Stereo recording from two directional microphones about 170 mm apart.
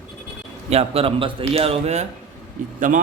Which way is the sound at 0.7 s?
35° right (ahead or behind).